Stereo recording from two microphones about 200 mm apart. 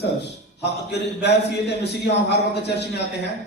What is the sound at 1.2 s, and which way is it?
A man's voice, 60° left (ahead or behind).